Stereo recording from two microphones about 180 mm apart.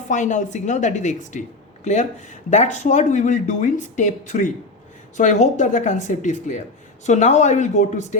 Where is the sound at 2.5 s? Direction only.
40° left (ahead or behind).